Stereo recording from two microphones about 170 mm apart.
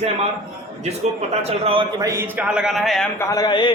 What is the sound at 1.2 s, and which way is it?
A man's voice, 35° right (ahead or behind).